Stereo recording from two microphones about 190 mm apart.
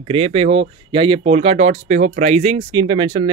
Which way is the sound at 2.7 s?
25° right (ahead or behind).